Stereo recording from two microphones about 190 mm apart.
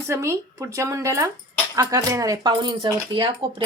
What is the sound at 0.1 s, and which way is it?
Speech, 15° right (ahead or behind).